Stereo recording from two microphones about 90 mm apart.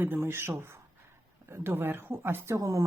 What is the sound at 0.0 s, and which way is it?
Speech, 25° right (ahead or behind).